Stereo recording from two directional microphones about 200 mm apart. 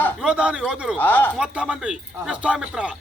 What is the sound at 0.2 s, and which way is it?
Speech, 5° right (ahead or behind).